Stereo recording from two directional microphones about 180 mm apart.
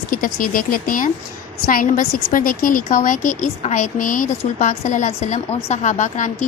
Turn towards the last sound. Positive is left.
turn(degrees=40)  # may be behind; listen again after turning